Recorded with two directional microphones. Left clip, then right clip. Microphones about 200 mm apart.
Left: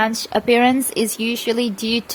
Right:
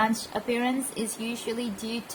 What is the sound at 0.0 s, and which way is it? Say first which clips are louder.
A woman's voice: left 8 dB; 45° left (ahead or behind).